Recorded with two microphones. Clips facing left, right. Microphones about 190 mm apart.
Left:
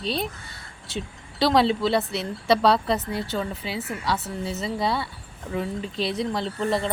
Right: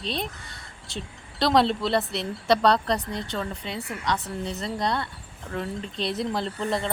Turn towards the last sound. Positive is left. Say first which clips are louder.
# left 2 dB
turn(degrees=0)  # may be behind; listen again after turning